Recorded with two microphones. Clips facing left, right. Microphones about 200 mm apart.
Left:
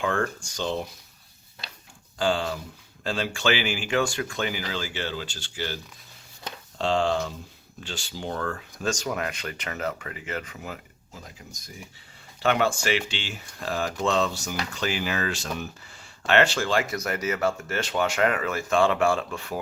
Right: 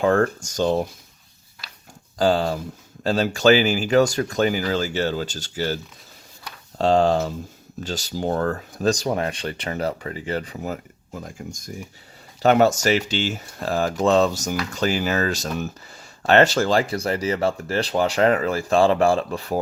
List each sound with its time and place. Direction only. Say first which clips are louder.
0.0 s speech: right 8 dB; 40° right (ahead or behind)
2.1 s speech: right 6 dB; 40° right (ahead or behind)
11.1 s speech: right 10 dB; 50° right (ahead or behind)